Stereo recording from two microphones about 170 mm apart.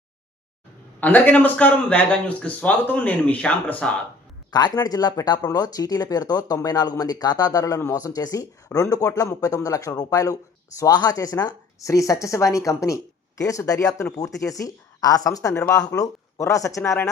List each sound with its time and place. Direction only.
1.0 s speech: 10° left (ahead or behind)
4.5 s speech: 25° left (ahead or behind)